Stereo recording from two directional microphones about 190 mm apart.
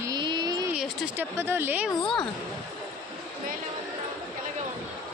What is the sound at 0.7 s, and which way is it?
Speech, 5° right (ahead or behind).